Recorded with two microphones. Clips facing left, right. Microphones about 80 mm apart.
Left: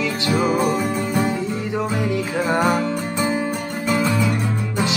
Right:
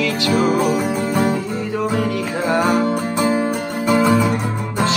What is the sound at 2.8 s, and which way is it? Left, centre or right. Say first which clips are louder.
Music: right 4 dB; right.